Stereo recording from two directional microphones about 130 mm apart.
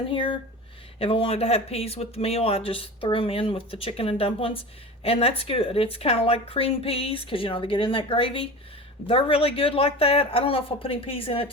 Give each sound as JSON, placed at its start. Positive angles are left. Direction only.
{"t": 0.1, "sound": "speech", "side_deg": 40}